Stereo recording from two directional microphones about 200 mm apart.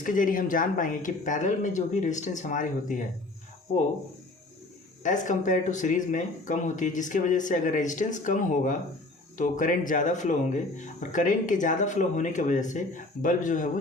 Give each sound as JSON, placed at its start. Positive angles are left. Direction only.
{"t": 0.0, "sound": "speech", "side_deg": 40}
{"t": 5.0, "sound": "speech", "side_deg": 40}